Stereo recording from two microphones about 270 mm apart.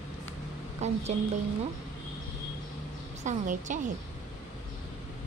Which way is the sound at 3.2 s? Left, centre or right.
Right.